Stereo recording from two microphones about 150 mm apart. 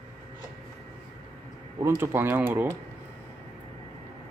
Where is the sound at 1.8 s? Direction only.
15° right (ahead or behind).